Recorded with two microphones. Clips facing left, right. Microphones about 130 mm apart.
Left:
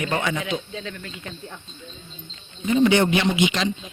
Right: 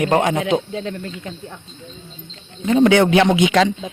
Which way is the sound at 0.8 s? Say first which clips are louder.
Right 8 dB; 35° right (ahead or behind).